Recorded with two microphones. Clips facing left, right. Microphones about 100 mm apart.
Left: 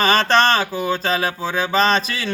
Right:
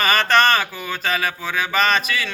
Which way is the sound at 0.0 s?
30° left (ahead or behind).